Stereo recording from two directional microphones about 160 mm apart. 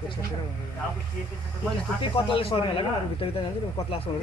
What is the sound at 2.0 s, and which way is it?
Speech, 35° left (ahead or behind).